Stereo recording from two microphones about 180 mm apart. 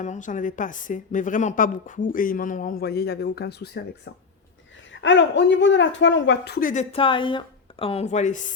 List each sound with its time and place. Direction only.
0.0 s speech: 40° left (ahead or behind); by 4.1 s 70° left (ahead or behind)
4.9 s speech: 90° left; by 6.8 s 50° left (ahead or behind)
6.9 s speech: 30° left (ahead or behind); by 8.5 s 45° left (ahead or behind)